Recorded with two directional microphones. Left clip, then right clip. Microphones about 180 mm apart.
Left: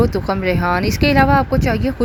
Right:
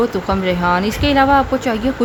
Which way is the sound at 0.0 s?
30° left (ahead or behind).